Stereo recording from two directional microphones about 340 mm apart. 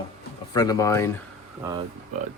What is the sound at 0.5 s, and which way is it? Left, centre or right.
Speech, centre.